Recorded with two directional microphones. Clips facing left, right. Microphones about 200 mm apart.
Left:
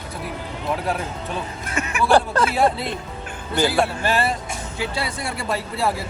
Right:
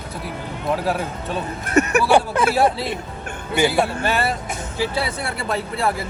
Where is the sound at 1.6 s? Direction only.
45° right (ahead or behind).